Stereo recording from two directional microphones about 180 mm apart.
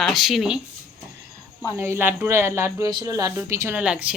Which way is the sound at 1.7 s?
15° right (ahead or behind).